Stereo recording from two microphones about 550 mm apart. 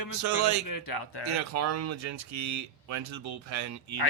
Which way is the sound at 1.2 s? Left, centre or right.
Right.